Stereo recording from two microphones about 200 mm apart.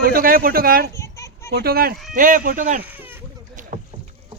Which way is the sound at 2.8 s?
10° right (ahead or behind).